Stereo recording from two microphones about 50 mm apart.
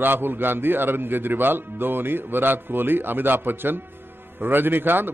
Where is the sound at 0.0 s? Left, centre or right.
Right.